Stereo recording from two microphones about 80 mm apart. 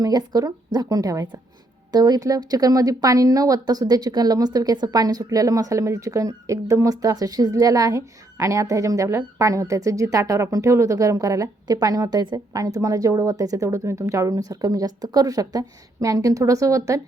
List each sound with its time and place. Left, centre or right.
0.0 s speech: right